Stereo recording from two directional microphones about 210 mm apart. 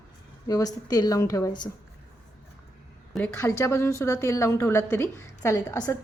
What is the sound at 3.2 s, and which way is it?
A woman's voice, 10° left (ahead or behind).